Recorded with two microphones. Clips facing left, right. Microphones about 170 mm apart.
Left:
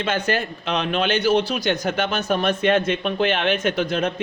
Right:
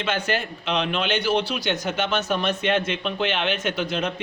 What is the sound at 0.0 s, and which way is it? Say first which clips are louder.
Speech: left 3 dB; 45° left (ahead or behind).